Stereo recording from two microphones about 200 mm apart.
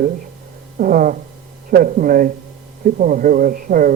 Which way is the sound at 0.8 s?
45° right (ahead or behind).